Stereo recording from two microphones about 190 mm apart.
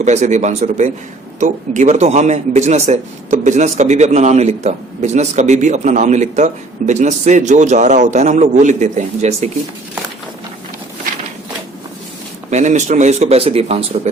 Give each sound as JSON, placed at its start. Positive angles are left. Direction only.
{"t": 0.0, "sound": "a man's voice", "side_deg": -40}
{"t": 12.5, "sound": "a man's voice", "side_deg": -40}